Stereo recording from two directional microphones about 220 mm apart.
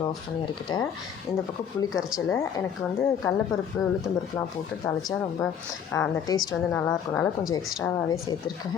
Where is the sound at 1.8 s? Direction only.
15° left (ahead or behind).